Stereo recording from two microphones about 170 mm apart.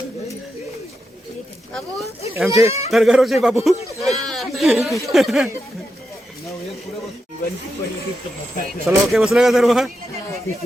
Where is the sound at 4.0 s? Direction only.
Centre (ahead or behind).